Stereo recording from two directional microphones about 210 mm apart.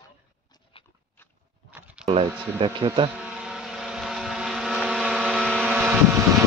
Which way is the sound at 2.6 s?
25° right (ahead or behind).